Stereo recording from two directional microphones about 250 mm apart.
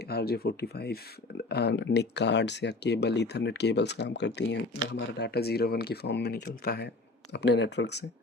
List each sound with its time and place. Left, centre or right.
0.1 s speech: left